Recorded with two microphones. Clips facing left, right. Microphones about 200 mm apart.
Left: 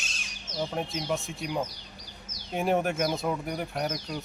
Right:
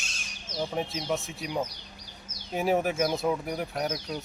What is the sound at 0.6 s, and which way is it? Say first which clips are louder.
Speech: even; centre (ahead or behind).